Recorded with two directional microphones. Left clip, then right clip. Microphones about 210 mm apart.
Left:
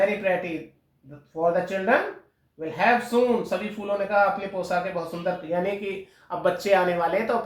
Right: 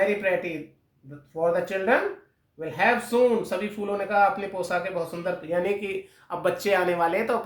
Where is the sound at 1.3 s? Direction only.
25° right (ahead or behind).